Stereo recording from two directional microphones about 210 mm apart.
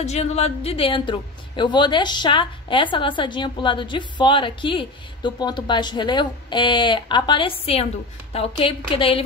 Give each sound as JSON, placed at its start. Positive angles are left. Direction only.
{"t": 0.0, "sound": "a woman's voice", "side_deg": 30}